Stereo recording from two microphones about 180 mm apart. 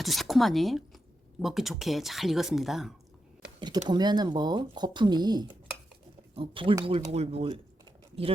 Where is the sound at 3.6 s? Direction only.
25° right (ahead or behind).